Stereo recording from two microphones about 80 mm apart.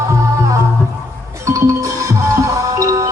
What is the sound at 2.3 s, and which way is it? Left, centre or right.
Music, right.